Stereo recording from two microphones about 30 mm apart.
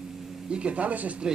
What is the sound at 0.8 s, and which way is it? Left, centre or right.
Speech, right.